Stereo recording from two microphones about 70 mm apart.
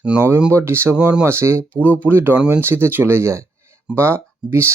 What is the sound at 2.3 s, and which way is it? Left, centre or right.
Speech, centre.